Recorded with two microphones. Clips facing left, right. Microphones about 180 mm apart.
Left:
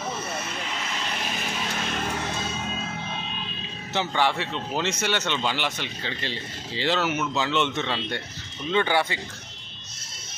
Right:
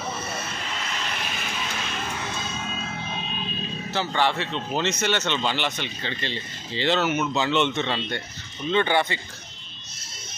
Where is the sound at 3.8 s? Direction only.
15° left (ahead or behind).